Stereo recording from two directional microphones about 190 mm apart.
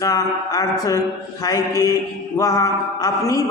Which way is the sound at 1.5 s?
20° left (ahead or behind).